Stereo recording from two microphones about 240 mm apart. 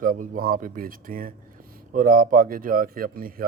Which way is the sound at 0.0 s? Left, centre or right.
Right.